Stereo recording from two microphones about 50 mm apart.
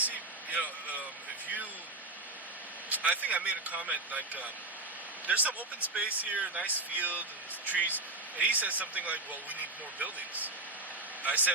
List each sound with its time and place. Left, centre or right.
0.0 s vehicle: right
2.9 s speech: right